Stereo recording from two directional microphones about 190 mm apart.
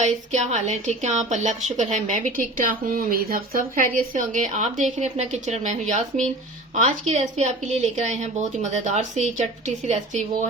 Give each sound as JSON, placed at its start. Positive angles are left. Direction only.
{"t": 0.0, "sound": "a woman's voice", "side_deg": -40}
{"t": 6.7, "sound": "a woman's voice", "side_deg": -40}